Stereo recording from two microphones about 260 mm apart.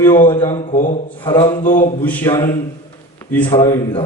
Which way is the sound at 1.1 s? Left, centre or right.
Centre.